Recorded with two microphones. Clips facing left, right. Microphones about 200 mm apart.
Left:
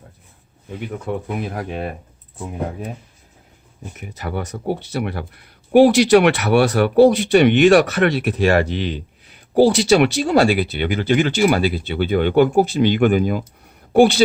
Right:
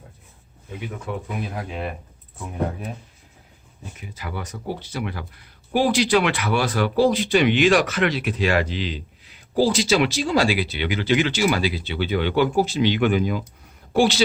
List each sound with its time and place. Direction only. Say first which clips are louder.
1.4 s speech: left 4 dB; 55° left (ahead or behind)
4.0 s speech: left 6 dB; 55° left (ahead or behind)